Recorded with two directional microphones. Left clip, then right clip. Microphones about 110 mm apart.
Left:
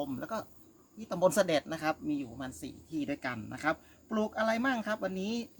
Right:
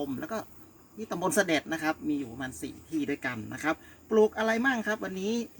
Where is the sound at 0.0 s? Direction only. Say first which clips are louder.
Right 2 dB; 30° left (ahead or behind).